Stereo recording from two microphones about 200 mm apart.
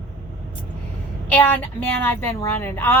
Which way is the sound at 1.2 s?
10° left (ahead or behind).